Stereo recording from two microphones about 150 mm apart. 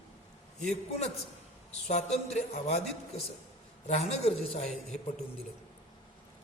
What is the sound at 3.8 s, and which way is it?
Speech, 45° left (ahead or behind).